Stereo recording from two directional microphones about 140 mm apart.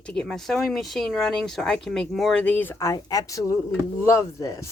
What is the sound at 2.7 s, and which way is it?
Speech, 25° left (ahead or behind).